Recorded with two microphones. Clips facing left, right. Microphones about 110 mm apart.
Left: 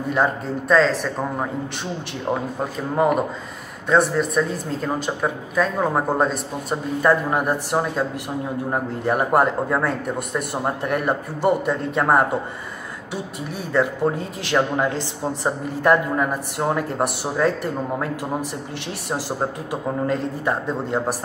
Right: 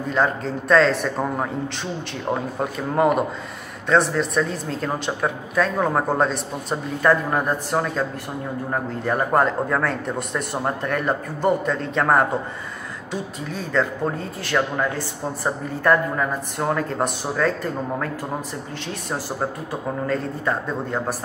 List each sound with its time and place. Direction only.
0.1 s a woman's voice: 10° left (ahead or behind)
2.6 s a woman's voice: centre (ahead or behind)
13.5 s a man's voice: 15° left (ahead or behind)
19.7 s a man's voice: 15° left (ahead or behind)